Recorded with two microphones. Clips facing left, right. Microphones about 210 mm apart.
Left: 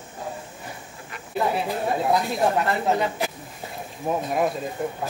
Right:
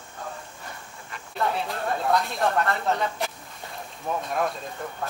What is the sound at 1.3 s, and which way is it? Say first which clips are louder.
A woman's voice: left 3 dB; 5° left (ahead or behind).